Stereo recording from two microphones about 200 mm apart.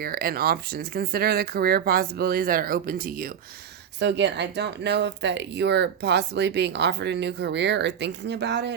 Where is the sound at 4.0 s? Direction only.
60° right (ahead or behind).